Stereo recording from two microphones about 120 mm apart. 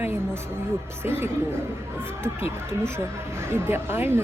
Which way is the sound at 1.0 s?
20° right (ahead or behind).